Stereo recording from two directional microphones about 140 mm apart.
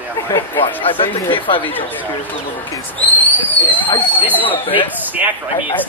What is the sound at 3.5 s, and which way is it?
Speech, 15° left (ahead or behind).